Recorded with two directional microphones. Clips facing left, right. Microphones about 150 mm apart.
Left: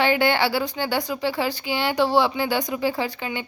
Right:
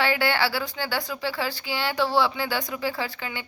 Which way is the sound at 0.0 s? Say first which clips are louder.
Left 4 dB; 20° left (ahead or behind).